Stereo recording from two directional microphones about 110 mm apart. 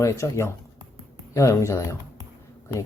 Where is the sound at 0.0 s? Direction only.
25° left (ahead or behind).